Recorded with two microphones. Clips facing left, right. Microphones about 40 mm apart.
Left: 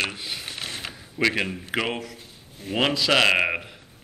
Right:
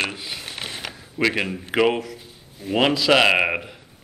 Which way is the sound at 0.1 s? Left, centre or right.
Centre.